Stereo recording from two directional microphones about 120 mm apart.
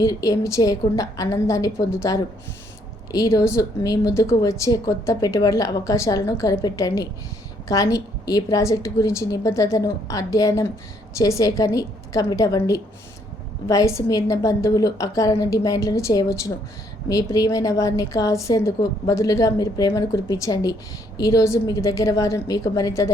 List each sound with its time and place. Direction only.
0.0 s speech: 30° left (ahead or behind)